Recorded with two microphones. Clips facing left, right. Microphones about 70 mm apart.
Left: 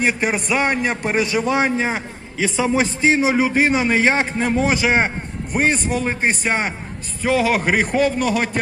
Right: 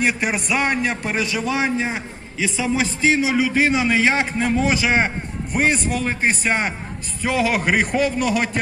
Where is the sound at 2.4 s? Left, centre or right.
Left.